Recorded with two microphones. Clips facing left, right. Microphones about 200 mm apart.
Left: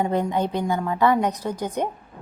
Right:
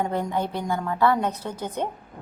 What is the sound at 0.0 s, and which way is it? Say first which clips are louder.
A woman's voice: left 3 dB; 15° left (ahead or behind).